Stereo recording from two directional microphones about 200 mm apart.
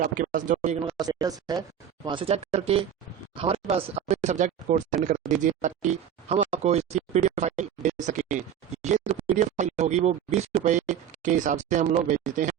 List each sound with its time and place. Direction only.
0.0 s speech: 40° right (ahead or behind)
0.9 s speech: 20° right (ahead or behind); by 12.2 s 40° right (ahead or behind)